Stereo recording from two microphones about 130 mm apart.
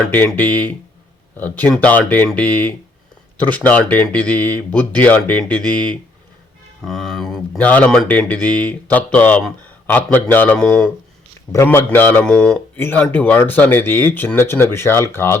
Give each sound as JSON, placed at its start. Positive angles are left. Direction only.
{"t": 0.3, "sound": "speech", "side_deg": 15}